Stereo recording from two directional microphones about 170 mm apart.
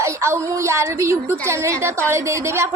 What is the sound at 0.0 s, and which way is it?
A woman's voice, 15° right (ahead or behind).